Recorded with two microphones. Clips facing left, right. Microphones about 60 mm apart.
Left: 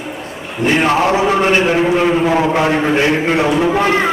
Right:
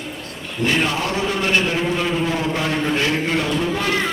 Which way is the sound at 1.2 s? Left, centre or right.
Left.